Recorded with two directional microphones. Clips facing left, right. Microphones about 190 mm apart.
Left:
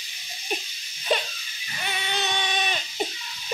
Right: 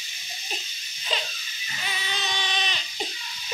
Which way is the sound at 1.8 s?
55° left (ahead or behind).